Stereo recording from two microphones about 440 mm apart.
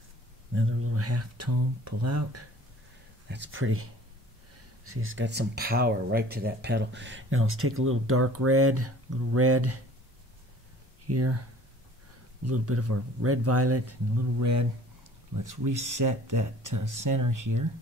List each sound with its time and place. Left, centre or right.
0.6 s speech: right
4.8 s speech: right
11.1 s speech: right
12.4 s speech: right